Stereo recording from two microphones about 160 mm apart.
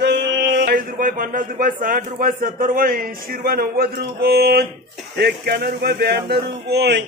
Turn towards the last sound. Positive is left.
turn(degrees=-90)